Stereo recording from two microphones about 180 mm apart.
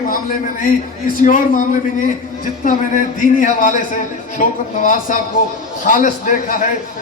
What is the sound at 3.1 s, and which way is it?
A man's voice, 45° left (ahead or behind).